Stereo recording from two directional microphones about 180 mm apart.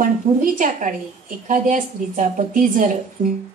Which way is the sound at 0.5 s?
45° right (ahead or behind).